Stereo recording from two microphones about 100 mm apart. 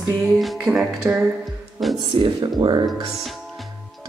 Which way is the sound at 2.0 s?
55° right (ahead or behind).